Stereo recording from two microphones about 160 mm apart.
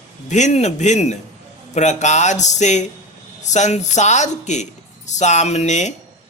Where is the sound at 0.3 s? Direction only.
45° left (ahead or behind).